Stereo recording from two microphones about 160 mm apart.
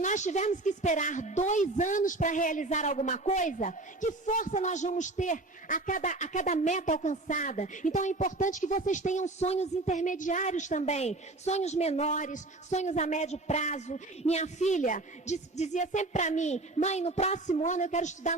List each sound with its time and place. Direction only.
0.0 s speech: 50° left (ahead or behind)